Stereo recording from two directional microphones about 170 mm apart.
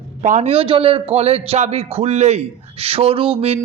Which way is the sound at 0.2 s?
45° right (ahead or behind).